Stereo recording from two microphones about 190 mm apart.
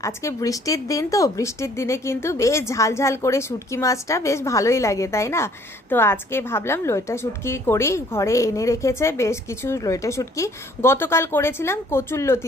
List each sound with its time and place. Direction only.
0.0 s a woman's voice: 15° left (ahead or behind)